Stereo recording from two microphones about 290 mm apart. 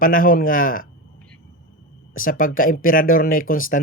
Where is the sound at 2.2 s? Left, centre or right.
Left.